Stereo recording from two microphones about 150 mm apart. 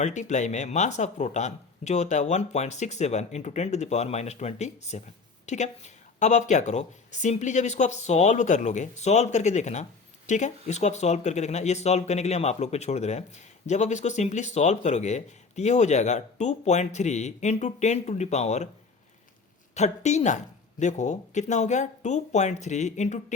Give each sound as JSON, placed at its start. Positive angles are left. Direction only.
{"t": 0.0, "sound": "speech", "side_deg": 55}
{"t": 19.7, "sound": "speech", "side_deg": 50}